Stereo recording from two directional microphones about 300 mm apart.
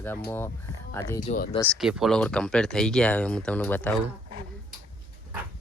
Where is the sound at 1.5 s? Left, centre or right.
Centre.